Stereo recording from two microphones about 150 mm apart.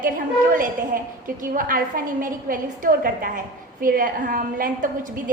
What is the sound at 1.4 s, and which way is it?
A woman's voice, 65° right (ahead or behind).